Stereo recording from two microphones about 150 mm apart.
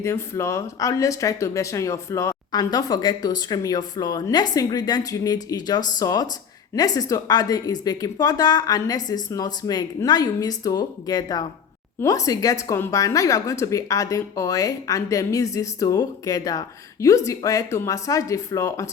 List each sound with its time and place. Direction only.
0.0 s a woman's voice: 20° left (ahead or behind)